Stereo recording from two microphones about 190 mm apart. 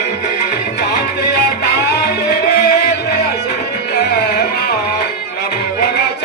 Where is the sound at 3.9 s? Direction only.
60° left (ahead or behind).